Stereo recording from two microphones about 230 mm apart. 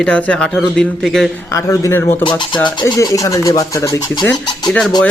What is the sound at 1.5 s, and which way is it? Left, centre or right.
Speech, centre.